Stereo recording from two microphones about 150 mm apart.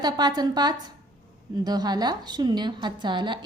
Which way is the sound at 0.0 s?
25° right (ahead or behind).